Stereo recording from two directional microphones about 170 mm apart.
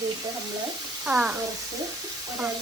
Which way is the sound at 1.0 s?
5° right (ahead or behind).